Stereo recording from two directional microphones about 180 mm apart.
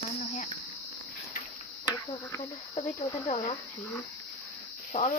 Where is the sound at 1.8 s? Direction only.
15° left (ahead or behind).